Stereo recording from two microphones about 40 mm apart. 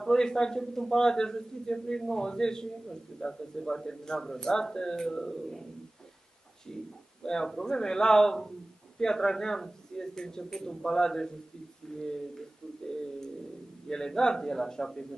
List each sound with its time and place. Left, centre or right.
0.0 s a man's voice: centre
6.7 s a man's voice: centre